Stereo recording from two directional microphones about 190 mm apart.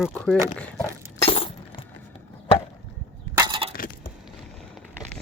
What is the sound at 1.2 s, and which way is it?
Breaking, 30° left (ahead or behind).